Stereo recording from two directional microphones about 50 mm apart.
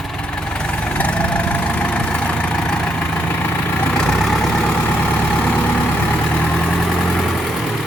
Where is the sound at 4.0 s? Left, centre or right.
Centre.